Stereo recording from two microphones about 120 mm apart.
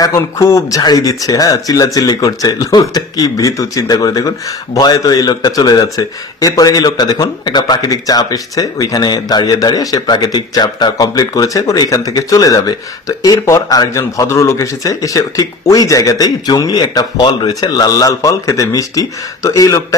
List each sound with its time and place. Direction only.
0.0 s speech: 25° left (ahead or behind)